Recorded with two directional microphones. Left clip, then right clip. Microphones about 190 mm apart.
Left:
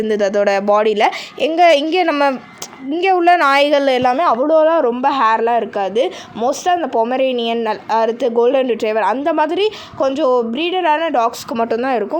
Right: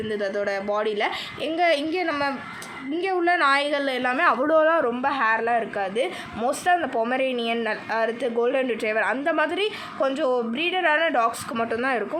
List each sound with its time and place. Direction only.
0.1 s a woman's voice: 45° left (ahead or behind)
4.1 s a man's voice: 25° left (ahead or behind)